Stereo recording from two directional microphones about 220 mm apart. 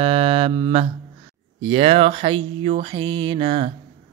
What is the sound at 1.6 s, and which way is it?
Music, 25° right (ahead or behind).